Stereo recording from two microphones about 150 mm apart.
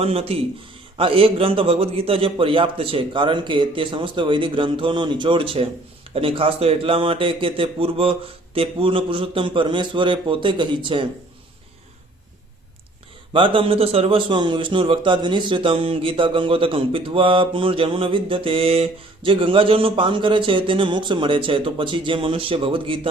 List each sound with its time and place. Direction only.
0.0 s a man's voice: 40° right (ahead or behind)
13.3 s a man's voice: 35° right (ahead or behind)